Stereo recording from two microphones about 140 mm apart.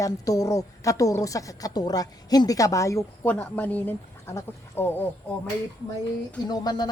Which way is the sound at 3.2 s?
10° left (ahead or behind).